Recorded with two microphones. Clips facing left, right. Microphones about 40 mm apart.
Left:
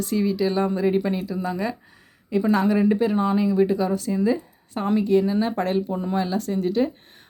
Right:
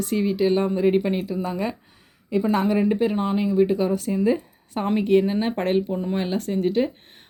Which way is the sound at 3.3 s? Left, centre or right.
Right.